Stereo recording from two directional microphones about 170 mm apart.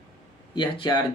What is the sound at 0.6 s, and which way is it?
Speech, 25° left (ahead or behind).